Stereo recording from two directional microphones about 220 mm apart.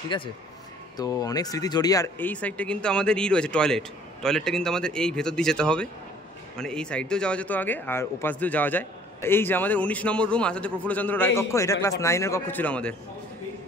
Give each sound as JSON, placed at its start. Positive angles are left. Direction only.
{"t": 0.1, "sound": "a man's voice", "side_deg": 20}